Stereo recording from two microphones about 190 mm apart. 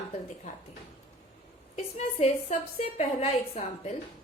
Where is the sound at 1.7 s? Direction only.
35° left (ahead or behind).